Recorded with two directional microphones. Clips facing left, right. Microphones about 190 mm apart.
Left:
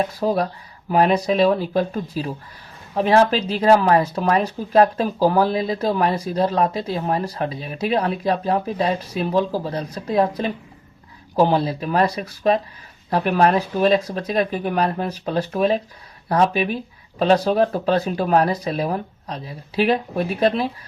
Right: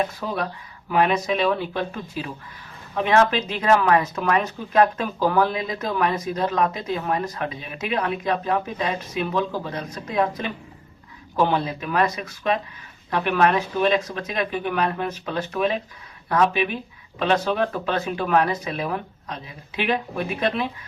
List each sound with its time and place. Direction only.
0.1 s speech: 35° left (ahead or behind)